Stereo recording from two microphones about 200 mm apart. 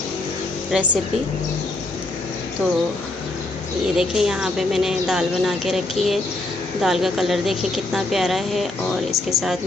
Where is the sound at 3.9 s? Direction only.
Centre (ahead or behind).